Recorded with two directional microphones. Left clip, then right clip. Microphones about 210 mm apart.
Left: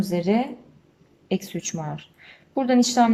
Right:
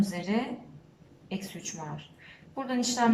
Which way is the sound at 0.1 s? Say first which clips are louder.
Left 9 dB; 50° left (ahead or behind).